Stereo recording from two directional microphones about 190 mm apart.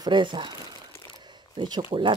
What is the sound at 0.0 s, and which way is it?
Speech, 25° right (ahead or behind).